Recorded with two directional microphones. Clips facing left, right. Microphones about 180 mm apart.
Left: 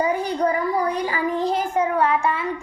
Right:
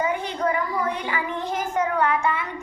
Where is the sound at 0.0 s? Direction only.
35° left (ahead or behind).